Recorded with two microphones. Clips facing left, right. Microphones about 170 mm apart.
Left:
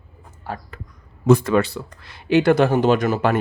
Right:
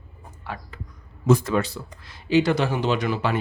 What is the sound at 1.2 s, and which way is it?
Speech, 60° left (ahead or behind).